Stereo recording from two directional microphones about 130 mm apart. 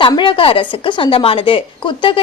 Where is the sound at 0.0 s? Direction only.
40° left (ahead or behind).